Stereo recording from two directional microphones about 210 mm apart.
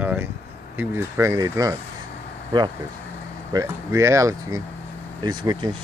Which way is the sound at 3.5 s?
15° right (ahead or behind).